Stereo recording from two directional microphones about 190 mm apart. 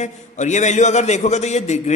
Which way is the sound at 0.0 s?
40° left (ahead or behind).